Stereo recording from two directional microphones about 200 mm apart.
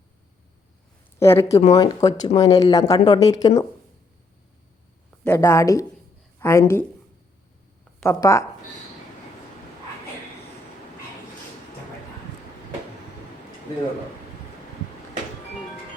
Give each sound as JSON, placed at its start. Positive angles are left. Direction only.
{"t": 1.2, "sound": "speech", "side_deg": 15}
{"t": 5.2, "sound": "speech", "side_deg": 10}
{"t": 8.0, "sound": "speech", "side_deg": 15}